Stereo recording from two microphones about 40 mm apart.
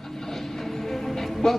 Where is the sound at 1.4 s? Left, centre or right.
Centre.